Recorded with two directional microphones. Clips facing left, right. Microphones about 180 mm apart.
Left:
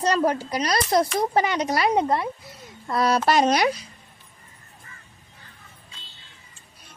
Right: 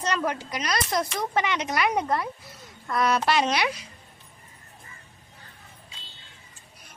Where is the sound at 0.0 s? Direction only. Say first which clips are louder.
Left 6 dB; 35° left (ahead or behind).